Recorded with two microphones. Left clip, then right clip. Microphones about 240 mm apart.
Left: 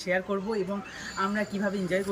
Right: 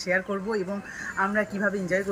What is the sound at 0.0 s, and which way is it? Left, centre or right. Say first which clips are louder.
Speech: right 2 dB; centre.